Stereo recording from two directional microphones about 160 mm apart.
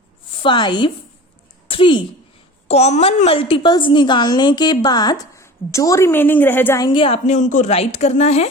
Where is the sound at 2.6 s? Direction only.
40° left (ahead or behind); by 6.8 s 15° left (ahead or behind).